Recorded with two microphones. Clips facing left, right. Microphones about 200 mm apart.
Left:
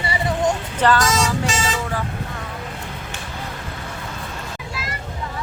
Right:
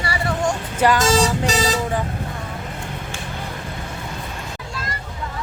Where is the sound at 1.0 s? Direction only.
35° right (ahead or behind).